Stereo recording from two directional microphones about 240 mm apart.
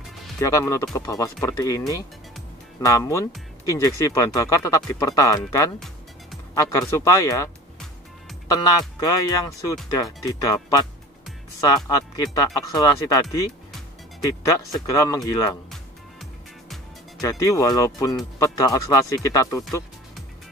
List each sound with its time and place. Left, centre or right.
0.4 s speech: centre
8.5 s speech: centre
15.7 s music: centre
17.2 s speech: centre